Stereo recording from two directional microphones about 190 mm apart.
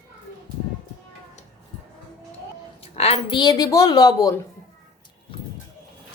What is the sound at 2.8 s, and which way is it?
Speech, 35° left (ahead or behind).